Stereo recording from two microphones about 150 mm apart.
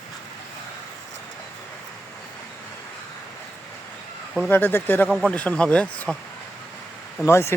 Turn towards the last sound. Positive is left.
turn(degrees=15)  # may be behind; listen again after turning